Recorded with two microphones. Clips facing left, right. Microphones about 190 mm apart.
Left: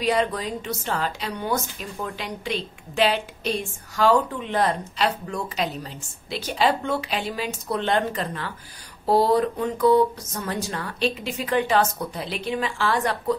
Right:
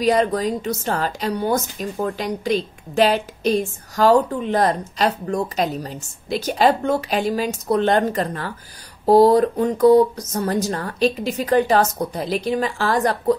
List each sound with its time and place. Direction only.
0.0 s a woman's voice: 45° right (ahead or behind)